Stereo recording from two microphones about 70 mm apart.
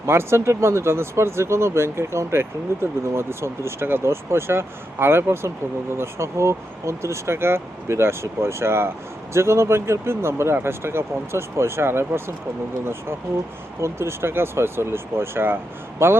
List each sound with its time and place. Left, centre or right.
0.0 s speech: right